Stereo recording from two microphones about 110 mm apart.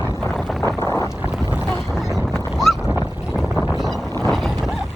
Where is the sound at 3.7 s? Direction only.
Centre (ahead or behind).